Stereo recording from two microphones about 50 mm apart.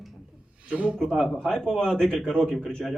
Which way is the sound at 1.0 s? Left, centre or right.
Centre.